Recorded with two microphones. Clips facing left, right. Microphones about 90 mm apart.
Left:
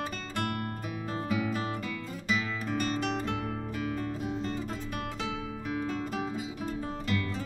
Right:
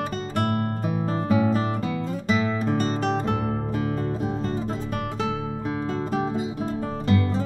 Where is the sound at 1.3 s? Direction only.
35° right (ahead or behind).